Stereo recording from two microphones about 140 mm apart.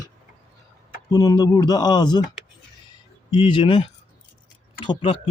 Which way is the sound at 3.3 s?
35° left (ahead or behind).